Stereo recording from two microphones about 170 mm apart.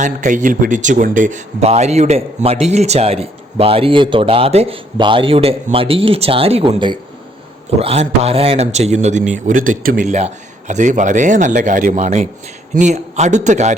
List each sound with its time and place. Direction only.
0.0 s a man's voice: 45° right (ahead or behind)